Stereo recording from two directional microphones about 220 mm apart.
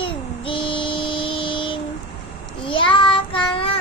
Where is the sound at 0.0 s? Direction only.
25° left (ahead or behind).